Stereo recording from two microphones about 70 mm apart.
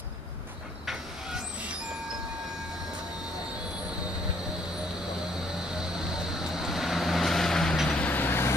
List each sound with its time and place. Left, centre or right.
5.7 s vehicle: centre
8.0 s vehicle: left